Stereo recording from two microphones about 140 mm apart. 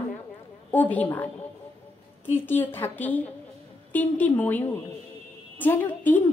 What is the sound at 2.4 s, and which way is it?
A woman's voice, 15° left (ahead or behind).